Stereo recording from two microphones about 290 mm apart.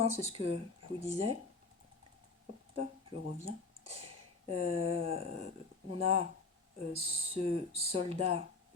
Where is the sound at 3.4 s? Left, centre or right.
Right.